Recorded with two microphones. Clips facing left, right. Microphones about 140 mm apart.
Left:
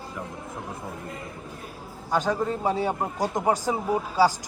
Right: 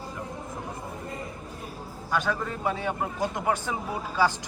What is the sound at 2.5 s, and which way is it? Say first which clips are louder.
A man's voice: left 4 dB; 35° left (ahead or behind).